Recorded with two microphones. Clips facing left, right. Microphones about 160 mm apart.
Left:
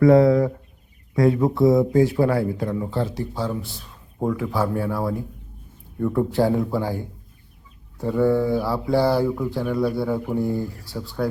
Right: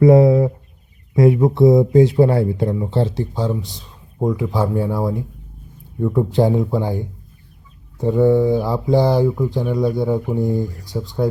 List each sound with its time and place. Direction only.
0.0 s speech: 20° right (ahead or behind)
7.9 s speech: 20° right (ahead or behind)